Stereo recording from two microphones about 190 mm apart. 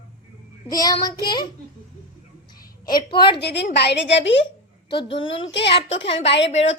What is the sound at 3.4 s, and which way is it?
A woman's voice, 65° left (ahead or behind).